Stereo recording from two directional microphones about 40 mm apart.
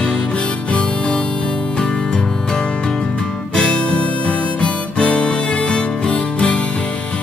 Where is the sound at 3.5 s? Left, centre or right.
Left.